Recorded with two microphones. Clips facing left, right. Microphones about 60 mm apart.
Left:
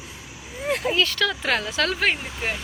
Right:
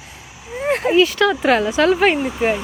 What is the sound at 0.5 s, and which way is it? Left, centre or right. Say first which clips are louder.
Speech: right 6 dB; right.